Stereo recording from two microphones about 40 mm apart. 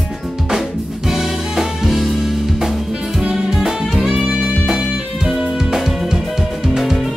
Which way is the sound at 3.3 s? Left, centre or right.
Centre.